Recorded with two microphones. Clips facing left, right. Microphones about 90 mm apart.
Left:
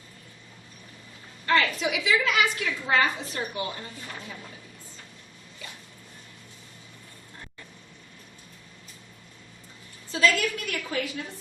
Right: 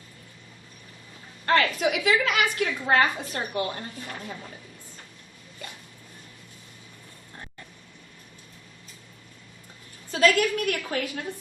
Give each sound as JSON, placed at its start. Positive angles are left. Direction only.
{"t": 1.5, "sound": "a woman's voice", "side_deg": -50}
{"t": 10.1, "sound": "a woman's voice", "side_deg": -50}